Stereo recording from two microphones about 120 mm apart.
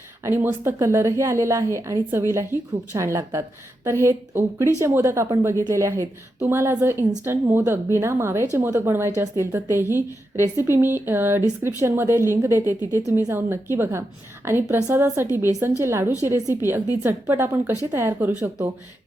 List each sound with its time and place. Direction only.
0.2 s a woman's voice: 20° right (ahead or behind)